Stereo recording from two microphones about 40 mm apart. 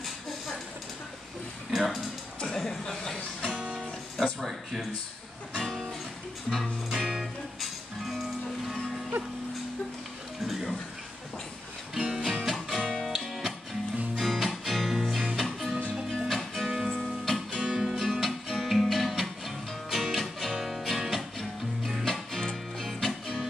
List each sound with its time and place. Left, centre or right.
1.7 s speech: centre
2.4 s a sound: centre
2.8 s chuckle: centre
3.4 s music: right
4.2 s speech: centre
5.6 s music: centre
6.9 s music: centre
10.4 s speech: centre
11.9 s music: centre
16.7 s music: centre
17.0 s music: centre
17.6 s music: centre
17.9 s music: centre
22.0 s music: centre